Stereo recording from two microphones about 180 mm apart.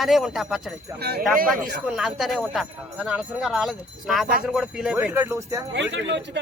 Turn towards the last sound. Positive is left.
turn(degrees=-80)